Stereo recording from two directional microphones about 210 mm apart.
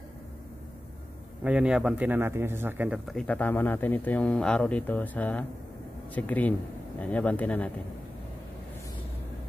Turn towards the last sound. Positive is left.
turn(degrees=5)  # may be behind; listen again after turning